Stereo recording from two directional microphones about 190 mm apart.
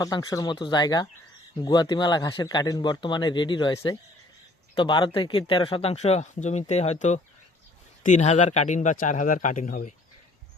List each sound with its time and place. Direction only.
0.0 s a man's voice: 20° left (ahead or behind); by 9.9 s 45° left (ahead or behind)